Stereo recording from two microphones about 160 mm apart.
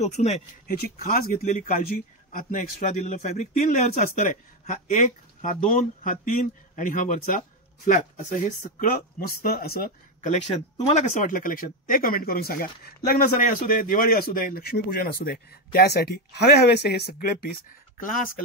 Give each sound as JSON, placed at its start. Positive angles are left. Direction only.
{"t": 0.0, "sound": "speech", "side_deg": 45}
{"t": 0.7, "sound": "speech", "side_deg": 65}
{"t": 3.1, "sound": "speech", "side_deg": 45}
{"t": 4.2, "sound": "speech", "side_deg": 55}
{"t": 10.2, "sound": "speech", "side_deg": 45}